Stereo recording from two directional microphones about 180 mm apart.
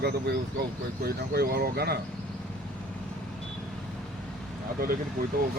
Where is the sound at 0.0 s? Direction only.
60° right (ahead or behind).